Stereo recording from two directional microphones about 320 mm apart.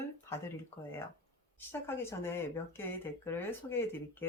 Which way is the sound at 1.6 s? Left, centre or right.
Centre.